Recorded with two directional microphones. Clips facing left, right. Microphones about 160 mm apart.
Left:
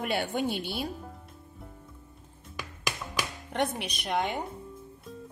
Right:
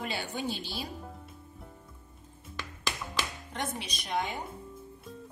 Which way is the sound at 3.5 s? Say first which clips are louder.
Left 6 dB; 65° left (ahead or behind).